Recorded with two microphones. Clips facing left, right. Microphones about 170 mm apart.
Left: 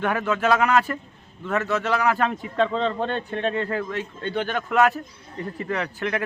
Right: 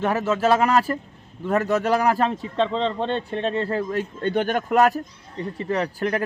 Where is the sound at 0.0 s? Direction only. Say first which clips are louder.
Right 2 dB; 30° right (ahead or behind).